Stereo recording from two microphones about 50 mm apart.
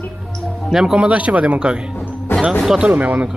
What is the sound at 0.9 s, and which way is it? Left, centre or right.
Speech, right.